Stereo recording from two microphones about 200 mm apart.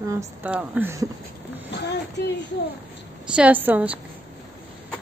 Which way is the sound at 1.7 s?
60° left (ahead or behind).